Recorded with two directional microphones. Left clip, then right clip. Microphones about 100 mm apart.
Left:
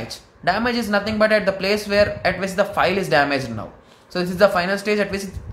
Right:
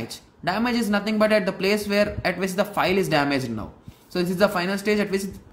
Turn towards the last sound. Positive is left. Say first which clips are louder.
# left 2 dB
turn(degrees=-35)  # may be behind; listen again after turning